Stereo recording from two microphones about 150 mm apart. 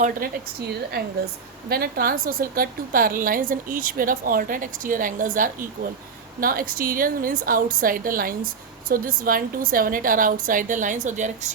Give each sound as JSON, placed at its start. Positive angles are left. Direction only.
{"t": 0.0, "sound": "a woman's voice", "side_deg": -65}
{"t": 1.7, "sound": "a woman's voice", "side_deg": -85}